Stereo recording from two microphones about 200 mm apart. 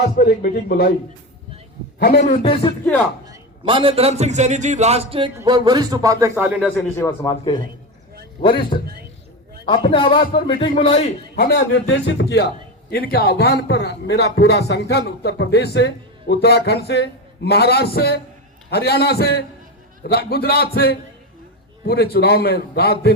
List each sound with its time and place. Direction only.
0.0 s a man's voice: 50° left (ahead or behind)
2.0 s a man's voice: 50° left (ahead or behind)
2.2 s a man's voice: 30° left (ahead or behind)
3.2 s a man's voice: 25° right (ahead or behind)
5.3 s speech: 15° right (ahead or behind)
6.9 s a man's voice: 15° left (ahead or behind)
11.3 s a man's voice: 50° left (ahead or behind)